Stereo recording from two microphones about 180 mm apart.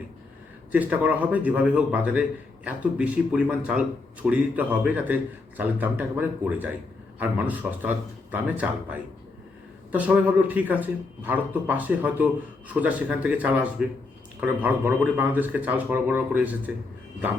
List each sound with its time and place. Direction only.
0.7 s a man's voice: 10° right (ahead or behind)